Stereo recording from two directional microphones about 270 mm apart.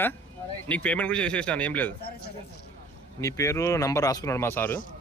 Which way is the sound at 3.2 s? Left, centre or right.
Centre.